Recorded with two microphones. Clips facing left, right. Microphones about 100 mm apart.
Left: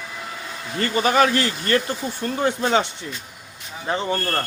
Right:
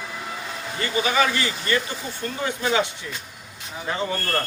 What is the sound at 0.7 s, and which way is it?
A man's voice, 45° left (ahead or behind).